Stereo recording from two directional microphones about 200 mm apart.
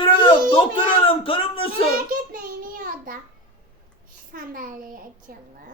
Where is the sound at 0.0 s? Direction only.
25° left (ahead or behind).